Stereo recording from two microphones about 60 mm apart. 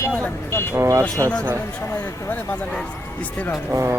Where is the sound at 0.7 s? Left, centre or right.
Right.